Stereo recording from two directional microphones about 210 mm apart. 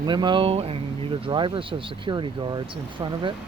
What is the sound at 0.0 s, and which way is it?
Speech, 20° right (ahead or behind).